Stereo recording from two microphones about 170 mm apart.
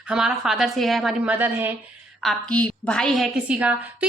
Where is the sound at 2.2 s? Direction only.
5° left (ahead or behind).